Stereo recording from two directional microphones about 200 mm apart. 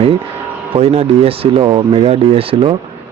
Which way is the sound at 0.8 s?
30° right (ahead or behind).